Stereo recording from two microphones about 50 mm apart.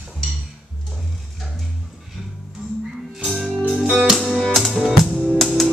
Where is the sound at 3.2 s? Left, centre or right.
Centre.